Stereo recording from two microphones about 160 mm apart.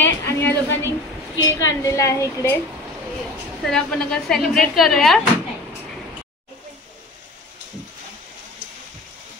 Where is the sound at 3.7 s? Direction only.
5° left (ahead or behind).